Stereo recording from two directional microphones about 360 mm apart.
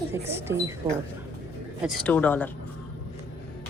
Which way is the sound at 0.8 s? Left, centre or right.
Centre.